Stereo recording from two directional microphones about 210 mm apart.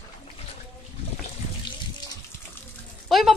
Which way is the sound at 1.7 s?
20° left (ahead or behind).